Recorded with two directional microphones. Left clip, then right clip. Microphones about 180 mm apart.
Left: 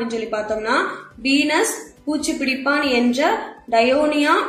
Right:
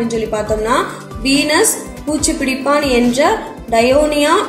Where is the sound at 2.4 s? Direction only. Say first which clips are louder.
Right 4 dB; 45° right (ahead or behind).